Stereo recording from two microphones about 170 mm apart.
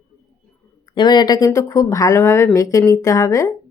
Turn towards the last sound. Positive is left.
turn(degrees=20)  # may be behind; listen again after turning